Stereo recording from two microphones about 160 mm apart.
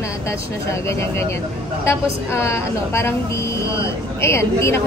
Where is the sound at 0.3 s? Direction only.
15° left (ahead or behind).